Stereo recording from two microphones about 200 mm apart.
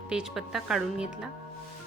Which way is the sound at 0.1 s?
5° right (ahead or behind).